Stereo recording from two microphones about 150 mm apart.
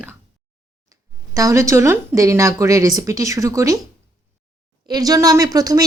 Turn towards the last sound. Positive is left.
turn(degrees=-25)  # may be behind; listen again after turning